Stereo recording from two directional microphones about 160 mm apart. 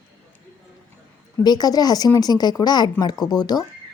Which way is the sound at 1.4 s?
25° left (ahead or behind).